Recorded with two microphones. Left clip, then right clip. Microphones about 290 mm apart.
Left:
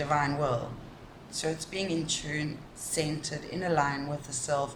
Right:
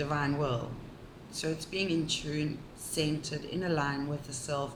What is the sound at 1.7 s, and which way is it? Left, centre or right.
Speech, left.